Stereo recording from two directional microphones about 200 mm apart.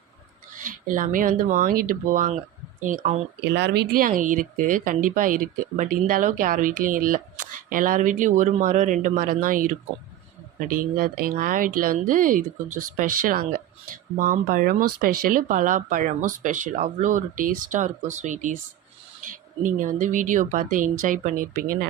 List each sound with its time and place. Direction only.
0.6 s speech: 40° right (ahead or behind)
3.4 s speech: 60° right (ahead or behind)